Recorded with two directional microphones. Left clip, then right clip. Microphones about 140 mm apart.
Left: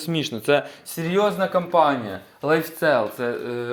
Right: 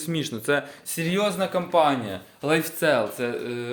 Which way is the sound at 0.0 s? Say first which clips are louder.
Left 3 dB; 15° left (ahead or behind).